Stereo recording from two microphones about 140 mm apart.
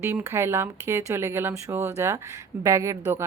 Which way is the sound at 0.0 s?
15° right (ahead or behind).